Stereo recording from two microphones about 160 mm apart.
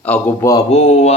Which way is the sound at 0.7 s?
40° left (ahead or behind).